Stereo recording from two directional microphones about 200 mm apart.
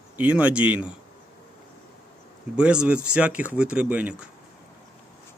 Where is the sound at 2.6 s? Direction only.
5° right (ahead or behind).